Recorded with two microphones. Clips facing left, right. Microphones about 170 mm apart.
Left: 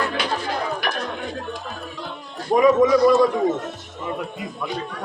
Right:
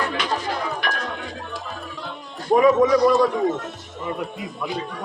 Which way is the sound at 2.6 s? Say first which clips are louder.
Left 1 dB; centre (ahead or behind).